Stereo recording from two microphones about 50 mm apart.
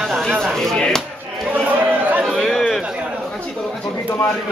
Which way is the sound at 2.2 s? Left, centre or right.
Centre.